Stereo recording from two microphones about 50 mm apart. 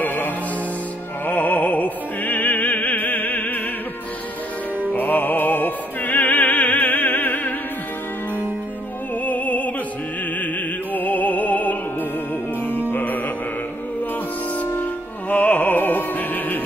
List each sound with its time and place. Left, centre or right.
0.0 s music: left
1.2 s opera: left
4.9 s music: left
9.2 s music: left
12.9 s music: left
14.8 s music: left